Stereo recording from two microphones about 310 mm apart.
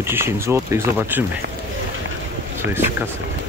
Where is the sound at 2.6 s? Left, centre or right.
Right.